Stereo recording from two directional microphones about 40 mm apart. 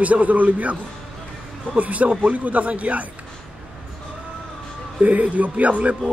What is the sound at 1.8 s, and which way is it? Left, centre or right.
A man's voice, right.